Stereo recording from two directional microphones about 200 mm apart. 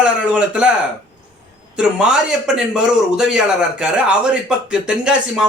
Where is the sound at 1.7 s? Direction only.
5° right (ahead or behind).